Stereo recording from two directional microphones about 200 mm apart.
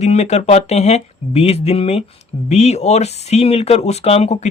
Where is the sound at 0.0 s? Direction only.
35° left (ahead or behind).